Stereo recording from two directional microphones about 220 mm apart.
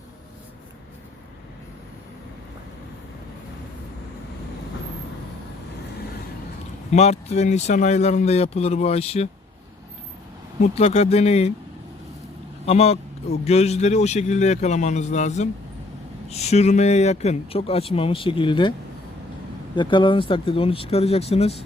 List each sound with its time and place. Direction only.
6.9 s speech: 30° left (ahead or behind)
10.6 s speech: 30° left (ahead or behind)
12.6 s speech: 30° left (ahead or behind)
19.7 s speech: 20° left (ahead or behind)